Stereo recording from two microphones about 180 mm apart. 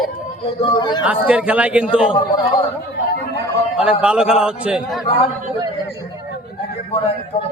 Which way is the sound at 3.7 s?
5° right (ahead or behind).